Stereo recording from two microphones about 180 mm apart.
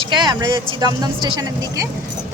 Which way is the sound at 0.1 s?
25° right (ahead or behind).